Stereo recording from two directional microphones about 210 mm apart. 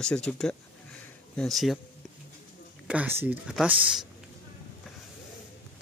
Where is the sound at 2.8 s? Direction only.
10° right (ahead or behind).